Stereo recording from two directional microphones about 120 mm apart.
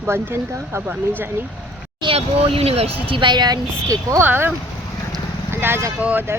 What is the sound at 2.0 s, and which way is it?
Speech, 50° right (ahead or behind).